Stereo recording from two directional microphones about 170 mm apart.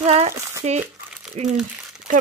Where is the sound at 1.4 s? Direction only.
40° right (ahead or behind).